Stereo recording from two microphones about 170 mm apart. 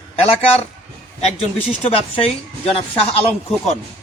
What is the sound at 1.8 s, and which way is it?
A man's voice, 35° left (ahead or behind).